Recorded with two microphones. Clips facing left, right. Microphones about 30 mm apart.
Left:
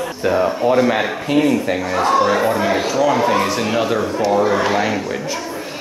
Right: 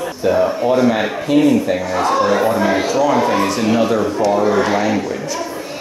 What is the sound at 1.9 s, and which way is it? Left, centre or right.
Speech, centre.